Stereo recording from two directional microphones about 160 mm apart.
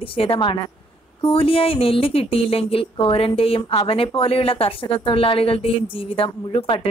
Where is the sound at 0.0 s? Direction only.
35° left (ahead or behind).